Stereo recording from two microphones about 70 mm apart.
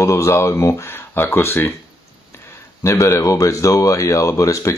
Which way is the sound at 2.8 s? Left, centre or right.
Left.